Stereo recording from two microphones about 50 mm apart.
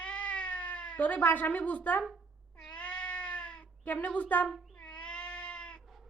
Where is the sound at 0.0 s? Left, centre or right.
Left.